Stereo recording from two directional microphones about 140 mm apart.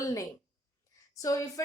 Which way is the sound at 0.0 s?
25° left (ahead or behind).